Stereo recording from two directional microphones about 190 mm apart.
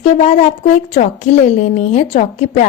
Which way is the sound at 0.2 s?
35° left (ahead or behind).